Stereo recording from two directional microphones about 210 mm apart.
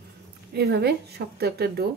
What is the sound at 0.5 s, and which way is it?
A woman's voice, 50° right (ahead or behind).